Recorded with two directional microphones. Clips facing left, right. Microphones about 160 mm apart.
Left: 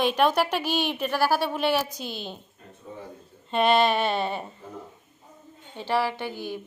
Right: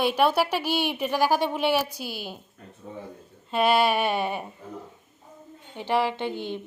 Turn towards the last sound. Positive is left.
turn(degrees=-20)  # may be behind; listen again after turning